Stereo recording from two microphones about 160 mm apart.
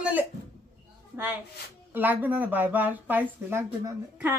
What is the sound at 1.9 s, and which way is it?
Speech, 10° right (ahead or behind).